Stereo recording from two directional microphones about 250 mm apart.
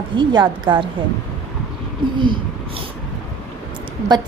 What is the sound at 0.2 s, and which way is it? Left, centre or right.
Speech, centre.